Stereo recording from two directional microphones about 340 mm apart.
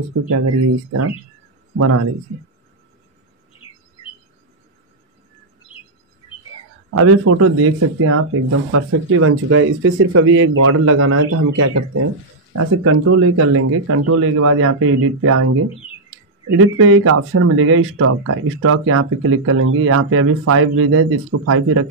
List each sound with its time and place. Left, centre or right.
0.3 s speech: right
6.9 s speech: right